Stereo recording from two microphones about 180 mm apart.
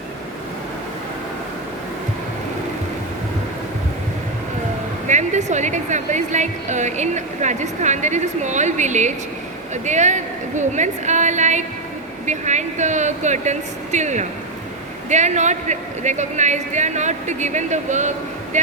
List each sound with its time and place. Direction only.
5.0 s a woman's voice: 40° right (ahead or behind)